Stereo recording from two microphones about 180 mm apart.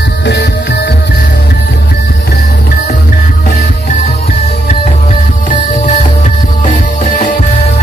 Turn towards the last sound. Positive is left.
turn(degrees=45)  # may be behind; listen again after turning